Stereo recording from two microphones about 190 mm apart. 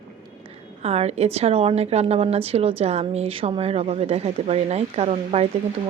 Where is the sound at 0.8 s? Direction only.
35° right (ahead or behind).